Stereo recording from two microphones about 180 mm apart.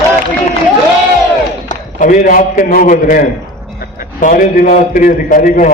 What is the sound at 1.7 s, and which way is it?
A man's voice, 50° left (ahead or behind).